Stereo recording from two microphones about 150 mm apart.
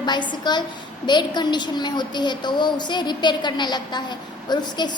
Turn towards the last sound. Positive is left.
turn(degrees=30)  # may be behind; listen again after turning